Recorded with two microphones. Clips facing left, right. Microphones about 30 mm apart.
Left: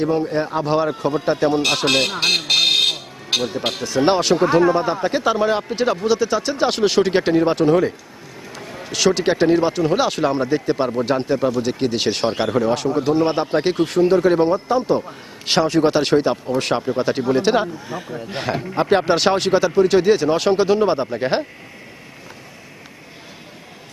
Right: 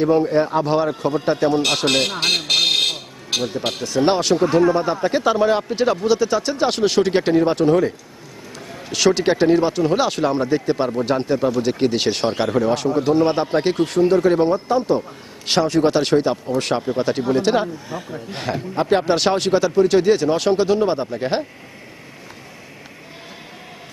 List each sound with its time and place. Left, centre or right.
0.0 s speech: centre
4.4 s speech: left
4.7 s speech: centre